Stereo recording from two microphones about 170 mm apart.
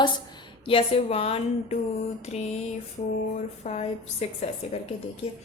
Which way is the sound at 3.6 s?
40° left (ahead or behind).